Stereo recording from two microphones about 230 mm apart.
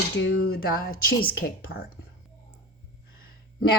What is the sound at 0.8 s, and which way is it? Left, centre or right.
Speech, left.